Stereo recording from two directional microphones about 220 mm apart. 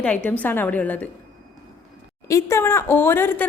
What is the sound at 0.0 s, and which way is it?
Speech, 5° left (ahead or behind).